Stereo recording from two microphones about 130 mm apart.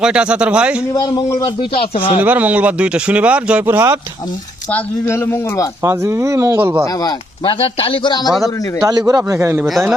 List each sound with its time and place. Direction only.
0.0 s speech: 10° right (ahead or behind)
0.9 s speech: 30° left (ahead or behind)
1.7 s speech: 45° left (ahead or behind)
2.2 s speech: 10° right (ahead or behind)
4.7 s speech: 20° left (ahead or behind)
5.8 s a man's voice: 20° right (ahead or behind)
7.0 s speech: 40° left (ahead or behind)
8.4 s a man's voice: 25° right (ahead or behind)